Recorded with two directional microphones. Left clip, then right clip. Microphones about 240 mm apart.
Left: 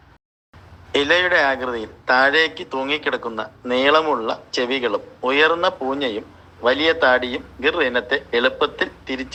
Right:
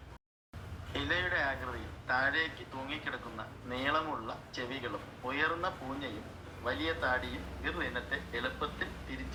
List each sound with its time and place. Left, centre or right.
0.9 s a man's voice: left